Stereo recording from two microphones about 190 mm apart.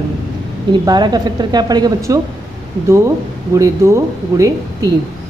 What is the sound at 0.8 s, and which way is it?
Speech, 20° right (ahead or behind).